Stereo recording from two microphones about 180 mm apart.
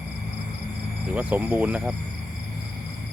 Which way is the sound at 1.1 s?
10° right (ahead or behind).